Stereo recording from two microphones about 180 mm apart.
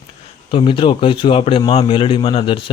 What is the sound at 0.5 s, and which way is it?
A man's voice, 30° left (ahead or behind).